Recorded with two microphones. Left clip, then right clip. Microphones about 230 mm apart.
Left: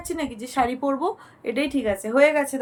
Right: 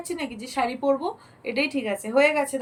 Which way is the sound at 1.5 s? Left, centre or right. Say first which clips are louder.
Even; left.